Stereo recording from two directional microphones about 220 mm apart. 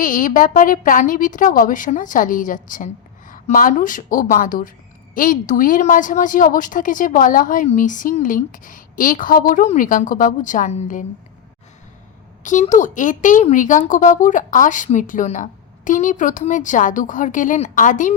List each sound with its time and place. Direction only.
0.0 s a woman's voice: 35° left (ahead or behind)
12.4 s a woman's voice: 35° left (ahead or behind)